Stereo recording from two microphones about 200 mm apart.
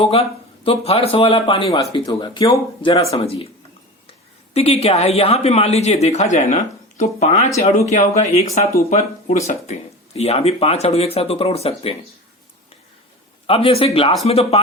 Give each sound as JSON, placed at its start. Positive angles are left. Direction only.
{"t": 0.0, "sound": "speech", "side_deg": 30}
{"t": 4.5, "sound": "speech", "side_deg": 30}
{"t": 13.5, "sound": "speech", "side_deg": 30}